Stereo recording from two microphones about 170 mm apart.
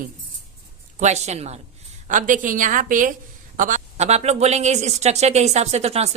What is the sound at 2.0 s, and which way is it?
A woman's voice, 50° right (ahead or behind).